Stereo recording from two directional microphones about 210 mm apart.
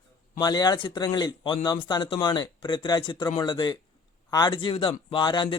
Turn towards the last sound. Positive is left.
turn(degrees=20)  # may be behind; listen again after turning